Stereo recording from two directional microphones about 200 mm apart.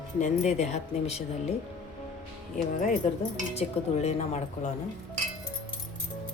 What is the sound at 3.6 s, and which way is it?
Speech, 35° left (ahead or behind).